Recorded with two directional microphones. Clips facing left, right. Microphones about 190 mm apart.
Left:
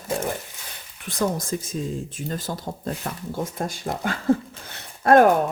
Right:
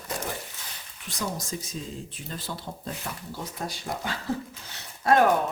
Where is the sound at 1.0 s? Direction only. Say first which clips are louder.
Left 8 dB; 55° left (ahead or behind).